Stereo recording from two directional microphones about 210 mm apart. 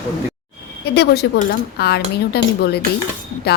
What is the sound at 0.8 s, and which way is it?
A woman's voice, 50° left (ahead or behind).